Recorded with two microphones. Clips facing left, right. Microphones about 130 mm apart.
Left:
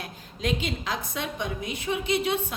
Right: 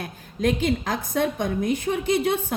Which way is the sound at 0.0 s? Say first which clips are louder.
Right 7 dB; 50° right (ahead or behind).